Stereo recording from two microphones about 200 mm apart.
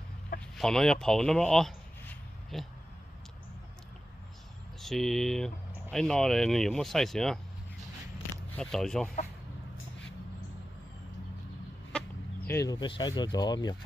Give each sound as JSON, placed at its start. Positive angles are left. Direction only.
{"t": 0.6, "sound": "speech", "side_deg": 0}
{"t": 4.8, "sound": "speech", "side_deg": 0}
{"t": 8.5, "sound": "speech", "side_deg": 5}
{"t": 12.4, "sound": "speech", "side_deg": 15}